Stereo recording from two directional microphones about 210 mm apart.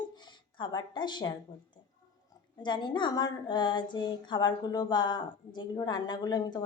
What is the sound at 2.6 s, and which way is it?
Speech, 20° left (ahead or behind).